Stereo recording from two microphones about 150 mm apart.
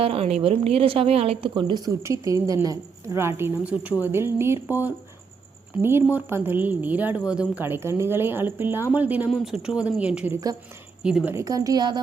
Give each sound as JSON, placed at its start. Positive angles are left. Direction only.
{"t": 0.0, "sound": "a woman's voice", "side_deg": -40}
{"t": 11.3, "sound": "a woman's voice", "side_deg": -25}